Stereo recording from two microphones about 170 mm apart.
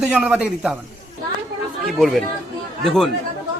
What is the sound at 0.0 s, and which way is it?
Speech, 5° right (ahead or behind).